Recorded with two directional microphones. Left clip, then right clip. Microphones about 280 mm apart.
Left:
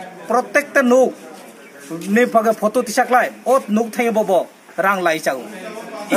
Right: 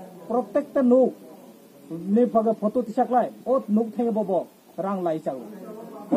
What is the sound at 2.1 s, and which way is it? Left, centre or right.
Speech, centre.